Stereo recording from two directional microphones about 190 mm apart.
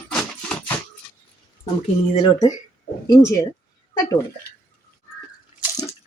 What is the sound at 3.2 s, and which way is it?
Speech, 15° left (ahead or behind).